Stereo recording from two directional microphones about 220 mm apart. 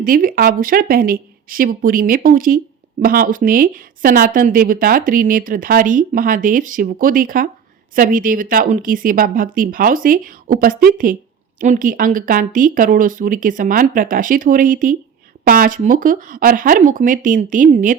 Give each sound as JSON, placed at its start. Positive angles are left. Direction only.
{"t": 0.0, "sound": "speech", "side_deg": -40}